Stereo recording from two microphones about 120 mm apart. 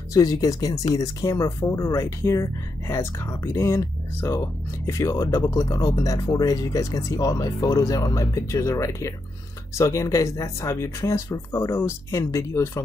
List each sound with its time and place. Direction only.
0.1 s speech: 30° left (ahead or behind)